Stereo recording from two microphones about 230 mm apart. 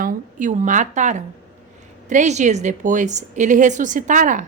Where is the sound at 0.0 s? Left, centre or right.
Right.